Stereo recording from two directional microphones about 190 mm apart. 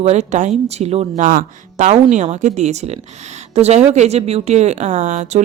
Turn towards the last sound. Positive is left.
turn(degrees=-40)  # may be behind; listen again after turning